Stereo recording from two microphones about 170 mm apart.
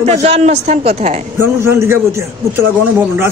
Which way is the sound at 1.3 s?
15° right (ahead or behind).